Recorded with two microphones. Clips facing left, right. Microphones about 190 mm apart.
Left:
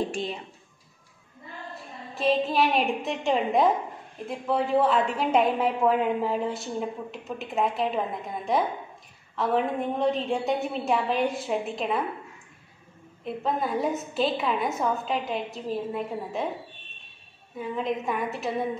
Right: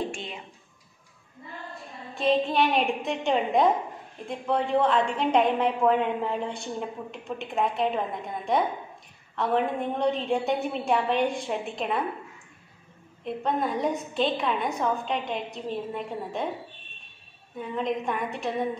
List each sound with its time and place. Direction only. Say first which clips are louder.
0.1 s speech: left 6 dB; 35° left (ahead or behind)
2.1 s a woman's voice: even; centre (ahead or behind)
13.2 s a woman's voice: right 1 dB; centre (ahead or behind)
17.6 s a woman's voice: even; 5° left (ahead or behind)